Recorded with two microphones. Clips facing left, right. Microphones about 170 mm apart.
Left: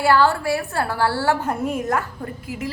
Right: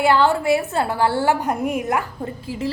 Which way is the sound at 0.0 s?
20° right (ahead or behind).